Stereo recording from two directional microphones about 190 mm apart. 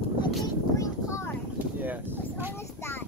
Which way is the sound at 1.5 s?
10° right (ahead or behind).